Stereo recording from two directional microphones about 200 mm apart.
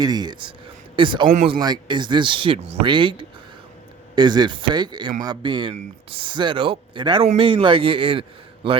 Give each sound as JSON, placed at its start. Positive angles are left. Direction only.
{"t": 0.0, "sound": "speech", "side_deg": -20}